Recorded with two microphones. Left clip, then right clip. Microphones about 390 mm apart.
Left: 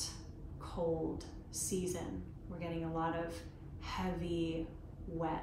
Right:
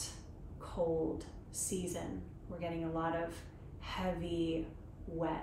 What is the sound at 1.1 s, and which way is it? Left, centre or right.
A woman's voice, centre.